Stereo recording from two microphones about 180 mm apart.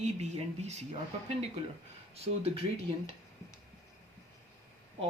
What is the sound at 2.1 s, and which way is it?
Speech, 35° right (ahead or behind).